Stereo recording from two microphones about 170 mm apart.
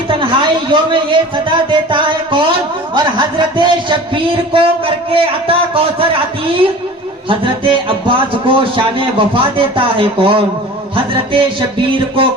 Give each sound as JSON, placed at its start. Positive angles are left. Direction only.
{"t": 0.1, "sound": "a man's voice", "side_deg": -30}
{"t": 7.3, "sound": "a man's voice", "side_deg": -30}